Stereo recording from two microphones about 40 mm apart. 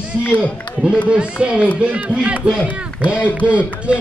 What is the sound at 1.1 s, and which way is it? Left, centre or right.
Speech, right.